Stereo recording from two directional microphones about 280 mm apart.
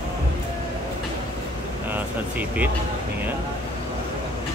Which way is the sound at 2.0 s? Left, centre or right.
Centre.